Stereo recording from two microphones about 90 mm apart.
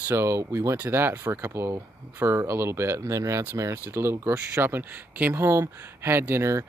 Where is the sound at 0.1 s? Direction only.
30° right (ahead or behind).